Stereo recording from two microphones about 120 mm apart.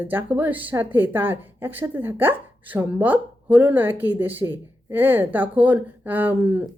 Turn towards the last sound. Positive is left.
turn(degrees=-15)  # may be behind; listen again after turning